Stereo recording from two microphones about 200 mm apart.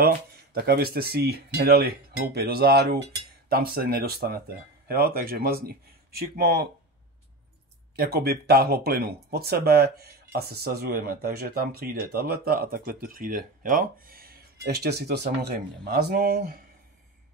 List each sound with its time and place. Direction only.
0.6 s speech: 50° right (ahead or behind)
7.9 s speech: 50° right (ahead or behind)